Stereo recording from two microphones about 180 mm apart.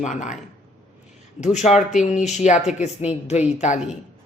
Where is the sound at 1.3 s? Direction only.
40° left (ahead or behind).